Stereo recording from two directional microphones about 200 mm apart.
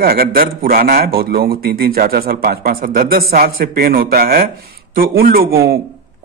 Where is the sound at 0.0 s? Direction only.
50° right (ahead or behind).